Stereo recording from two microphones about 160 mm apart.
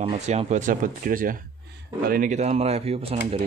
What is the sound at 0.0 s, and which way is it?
Speech, 45° right (ahead or behind).